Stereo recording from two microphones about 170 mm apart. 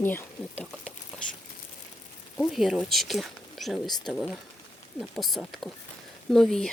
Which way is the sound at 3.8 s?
25° left (ahead or behind).